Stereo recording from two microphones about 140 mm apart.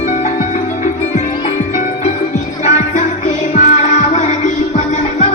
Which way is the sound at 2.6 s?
55° left (ahead or behind).